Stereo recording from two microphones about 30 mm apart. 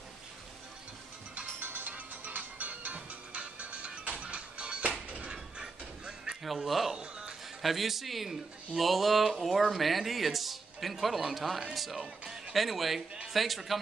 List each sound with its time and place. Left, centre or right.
1.6 s music: right
3.3 s music: right
5.3 s a sound: right
6.4 s speech: centre
7.0 s music: right
7.6 s a man's voice: centre